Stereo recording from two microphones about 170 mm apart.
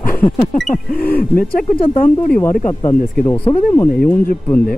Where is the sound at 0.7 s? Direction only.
60° left (ahead or behind).